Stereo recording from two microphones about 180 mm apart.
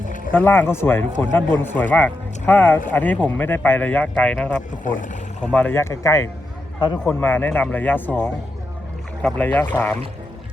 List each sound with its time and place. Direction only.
0.3 s speech: 10° left (ahead or behind)
4.8 s speech: 45° left (ahead or behind)
5.4 s a man's voice: 5° left (ahead or behind); by 7.0 s 25° left (ahead or behind)
7.0 s speech: 10° left (ahead or behind)